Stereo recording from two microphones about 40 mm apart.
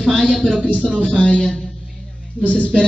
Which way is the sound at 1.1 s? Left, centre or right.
Left.